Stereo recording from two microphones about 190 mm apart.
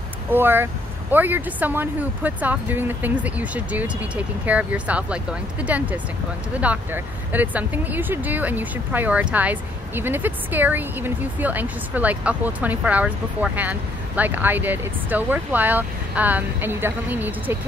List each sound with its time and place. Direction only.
0.3 s speech: 10° right (ahead or behind)